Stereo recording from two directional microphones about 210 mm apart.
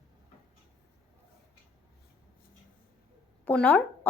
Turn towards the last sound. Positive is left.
turn(degrees=5)  # may be behind; listen again after turning